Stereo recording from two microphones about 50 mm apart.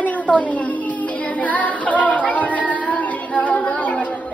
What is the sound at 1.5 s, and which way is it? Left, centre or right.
Music, left.